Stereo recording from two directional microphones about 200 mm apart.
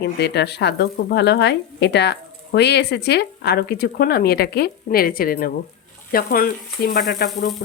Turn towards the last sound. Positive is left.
turn(degrees=55)  # may be behind; listen again after turning